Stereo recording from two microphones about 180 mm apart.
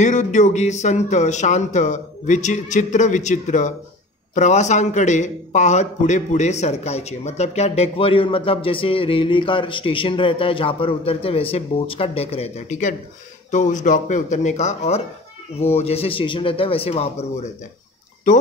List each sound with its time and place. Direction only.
0.0 s a man's voice: 40° left (ahead or behind)